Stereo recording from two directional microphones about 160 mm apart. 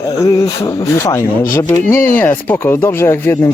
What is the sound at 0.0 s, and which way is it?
Speech, 25° left (ahead or behind).